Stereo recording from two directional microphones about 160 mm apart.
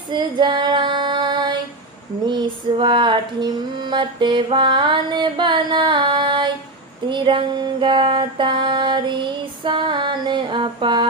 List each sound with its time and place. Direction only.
0.1 s female singing: 30° right (ahead or behind)
2.2 s music: 30° right (ahead or behind)
7.1 s a sound: 30° right (ahead or behind)